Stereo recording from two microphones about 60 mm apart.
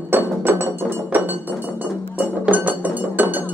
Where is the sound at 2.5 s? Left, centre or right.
Right.